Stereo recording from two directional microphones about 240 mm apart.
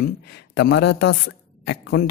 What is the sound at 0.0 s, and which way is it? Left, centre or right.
Speech, left.